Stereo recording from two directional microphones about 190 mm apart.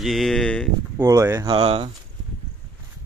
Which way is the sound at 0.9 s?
15° right (ahead or behind).